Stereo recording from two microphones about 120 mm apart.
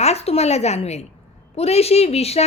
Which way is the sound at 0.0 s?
60° left (ahead or behind).